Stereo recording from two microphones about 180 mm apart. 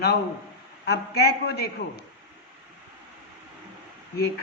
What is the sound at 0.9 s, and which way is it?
Speech, 65° left (ahead or behind).